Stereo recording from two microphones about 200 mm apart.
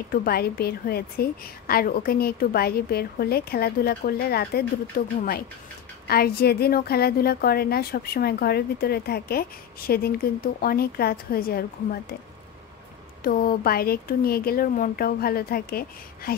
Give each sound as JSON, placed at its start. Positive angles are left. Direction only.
{"t": 0.1, "sound": "a woman's voice", "side_deg": 50}
{"t": 13.2, "sound": "a woman's voice", "side_deg": 45}